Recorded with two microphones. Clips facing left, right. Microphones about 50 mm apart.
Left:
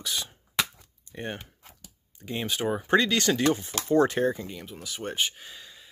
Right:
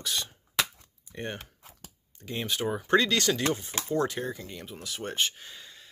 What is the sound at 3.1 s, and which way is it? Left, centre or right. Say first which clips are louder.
Speech: left 3 dB; left.